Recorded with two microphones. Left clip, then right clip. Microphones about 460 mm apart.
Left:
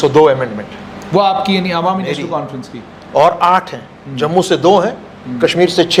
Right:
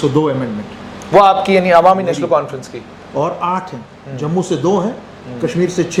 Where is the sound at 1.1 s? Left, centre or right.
Right.